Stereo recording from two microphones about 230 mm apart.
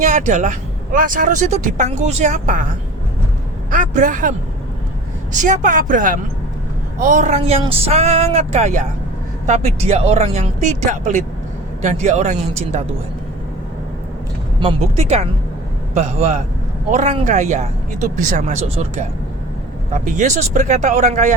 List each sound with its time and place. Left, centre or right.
0.0 s speech: right
3.7 s speech: right
14.6 s speech: right